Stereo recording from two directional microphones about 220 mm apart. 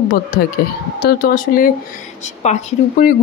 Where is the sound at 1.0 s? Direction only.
45° left (ahead or behind).